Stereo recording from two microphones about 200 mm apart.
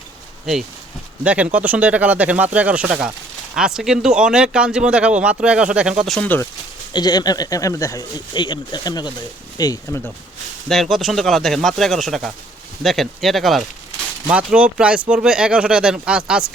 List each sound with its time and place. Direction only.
1.2 s speech: 5° right (ahead or behind); by 6.5 s 10° left (ahead or behind)
6.9 s speech: 20° left (ahead or behind)
10.7 s speech: centre (ahead or behind)